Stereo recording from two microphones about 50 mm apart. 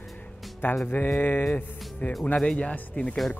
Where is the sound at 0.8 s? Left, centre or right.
Left.